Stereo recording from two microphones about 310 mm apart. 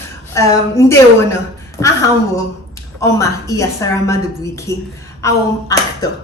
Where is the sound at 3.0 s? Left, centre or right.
Centre.